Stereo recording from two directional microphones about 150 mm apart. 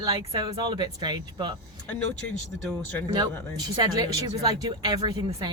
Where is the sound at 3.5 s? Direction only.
30° right (ahead or behind).